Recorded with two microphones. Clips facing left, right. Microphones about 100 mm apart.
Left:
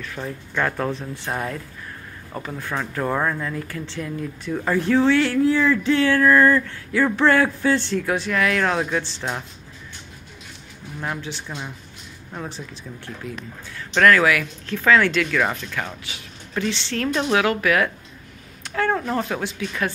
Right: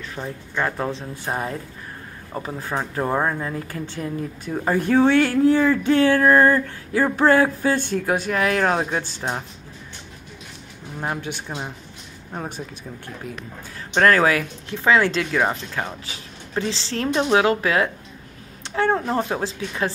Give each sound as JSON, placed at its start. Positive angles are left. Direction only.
{"t": 0.2, "sound": "speech", "side_deg": -20}
{"t": 3.6, "sound": "speech", "side_deg": -45}
{"t": 4.7, "sound": "speech", "side_deg": -50}
{"t": 11.1, "sound": "speech", "side_deg": -55}
{"t": 12.4, "sound": "speech", "side_deg": -50}
{"t": 13.7, "sound": "speech", "side_deg": -30}
{"t": 14.7, "sound": "speech", "side_deg": -25}